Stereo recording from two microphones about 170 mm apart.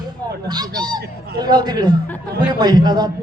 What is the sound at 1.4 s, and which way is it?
Speech, 25° right (ahead or behind).